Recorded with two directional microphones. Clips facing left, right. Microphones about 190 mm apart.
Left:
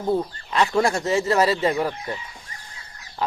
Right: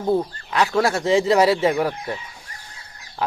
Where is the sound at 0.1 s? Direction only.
5° right (ahead or behind).